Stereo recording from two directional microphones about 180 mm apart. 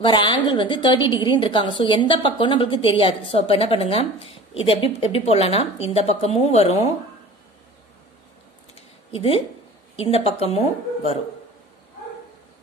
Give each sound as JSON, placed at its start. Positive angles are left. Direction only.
{"t": 0.0, "sound": "a woman's voice", "side_deg": 25}
{"t": 9.1, "sound": "speech", "side_deg": 30}